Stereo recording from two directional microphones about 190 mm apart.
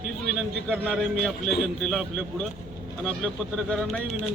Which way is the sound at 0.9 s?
Centre (ahead or behind).